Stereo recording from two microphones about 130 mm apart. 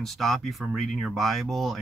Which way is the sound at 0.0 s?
Centre (ahead or behind).